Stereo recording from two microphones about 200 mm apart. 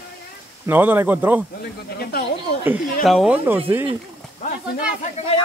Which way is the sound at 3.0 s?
Centre (ahead or behind).